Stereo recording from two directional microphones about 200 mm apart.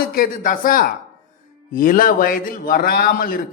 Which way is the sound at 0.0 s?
45° left (ahead or behind).